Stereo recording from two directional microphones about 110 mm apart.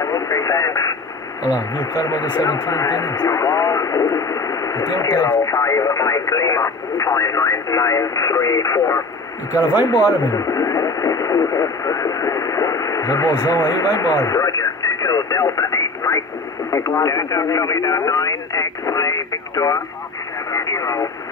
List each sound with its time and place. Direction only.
0.0 s radio: 30° left (ahead or behind)
1.8 s speech: 35° left (ahead or behind)
9.5 s speech: 15° right (ahead or behind)
10.3 s radio: 30° left (ahead or behind)
16.7 s speech: 30° left (ahead or behind)
20.5 s radio: 30° left (ahead or behind)